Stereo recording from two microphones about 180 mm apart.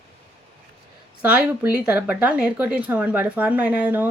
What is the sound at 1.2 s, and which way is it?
Speech, 10° right (ahead or behind).